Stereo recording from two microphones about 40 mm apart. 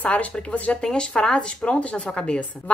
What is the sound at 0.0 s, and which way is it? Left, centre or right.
Speech, left.